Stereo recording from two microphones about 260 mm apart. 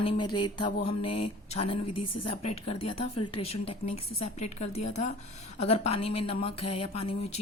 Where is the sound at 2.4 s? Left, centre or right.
Left.